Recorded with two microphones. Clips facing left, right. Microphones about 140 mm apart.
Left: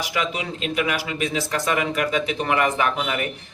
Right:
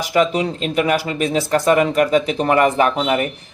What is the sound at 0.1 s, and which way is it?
Speech, 40° right (ahead or behind).